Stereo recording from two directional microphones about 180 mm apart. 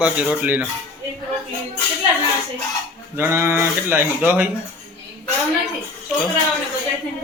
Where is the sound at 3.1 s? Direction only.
15° right (ahead or behind).